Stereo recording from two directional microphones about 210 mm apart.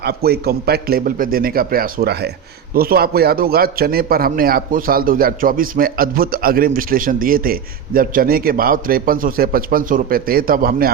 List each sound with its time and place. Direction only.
0.0 s a man's voice: 50° right (ahead or behind)